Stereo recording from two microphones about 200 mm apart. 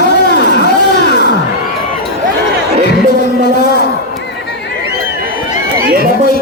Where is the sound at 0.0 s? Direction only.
60° left (ahead or behind).